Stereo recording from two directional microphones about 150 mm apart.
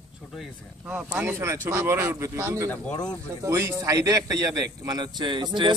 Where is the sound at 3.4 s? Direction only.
20° right (ahead or behind).